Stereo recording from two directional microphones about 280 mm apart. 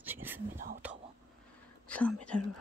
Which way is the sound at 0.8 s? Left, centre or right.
Centre.